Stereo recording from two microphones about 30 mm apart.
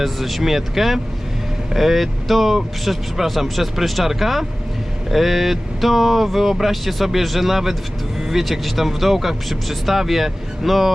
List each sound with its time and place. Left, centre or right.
0.0 s speech: centre